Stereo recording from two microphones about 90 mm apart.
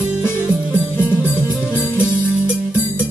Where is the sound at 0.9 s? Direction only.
25° left (ahead or behind).